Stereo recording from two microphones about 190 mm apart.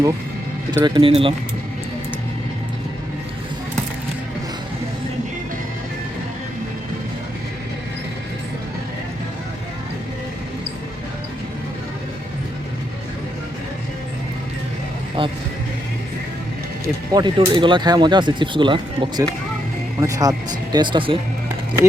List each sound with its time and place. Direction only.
0.7 s speech: 20° right (ahead or behind)
15.2 s speech: 25° right (ahead or behind)
17.1 s speech: 20° right (ahead or behind)